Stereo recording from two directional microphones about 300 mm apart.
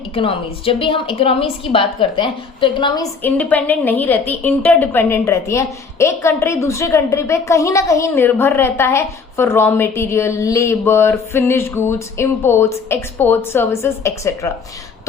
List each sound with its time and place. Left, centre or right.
0.1 s a woman's voice: centre